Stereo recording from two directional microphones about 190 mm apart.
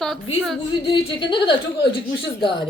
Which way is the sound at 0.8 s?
25° left (ahead or behind).